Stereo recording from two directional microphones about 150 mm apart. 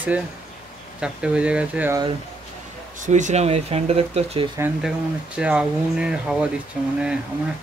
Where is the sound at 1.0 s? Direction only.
5° right (ahead or behind).